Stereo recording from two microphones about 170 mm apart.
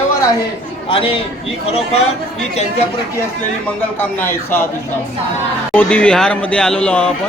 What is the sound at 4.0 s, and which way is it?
Speech, 10° left (ahead or behind).